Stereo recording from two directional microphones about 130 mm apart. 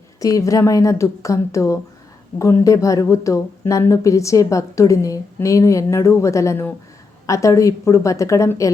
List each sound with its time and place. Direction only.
0.2 s speech: 25° left (ahead or behind)